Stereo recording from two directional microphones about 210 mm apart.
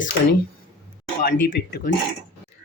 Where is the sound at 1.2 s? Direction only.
40° left (ahead or behind).